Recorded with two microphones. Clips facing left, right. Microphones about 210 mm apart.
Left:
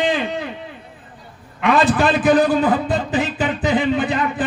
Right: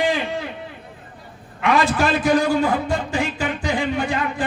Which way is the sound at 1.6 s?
15° left (ahead or behind).